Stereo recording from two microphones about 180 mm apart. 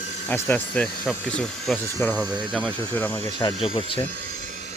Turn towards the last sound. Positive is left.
turn(degrees=30)  # may be behind; listen again after turning